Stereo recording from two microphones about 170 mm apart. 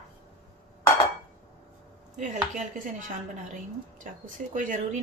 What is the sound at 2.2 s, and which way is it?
Speech, 50° right (ahead or behind).